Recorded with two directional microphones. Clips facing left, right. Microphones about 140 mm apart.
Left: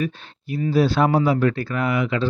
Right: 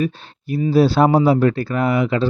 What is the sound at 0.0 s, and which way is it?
Speech, 35° right (ahead or behind).